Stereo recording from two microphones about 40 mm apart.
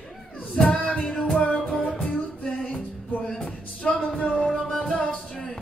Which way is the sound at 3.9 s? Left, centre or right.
Left.